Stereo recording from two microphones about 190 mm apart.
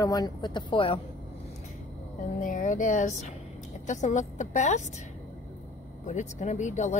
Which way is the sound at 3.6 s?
40° left (ahead or behind).